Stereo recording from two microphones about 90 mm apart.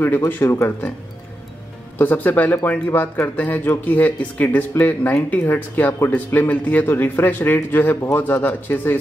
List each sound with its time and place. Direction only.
0.0 s speech: 25° left (ahead or behind)
2.0 s speech: 20° left (ahead or behind)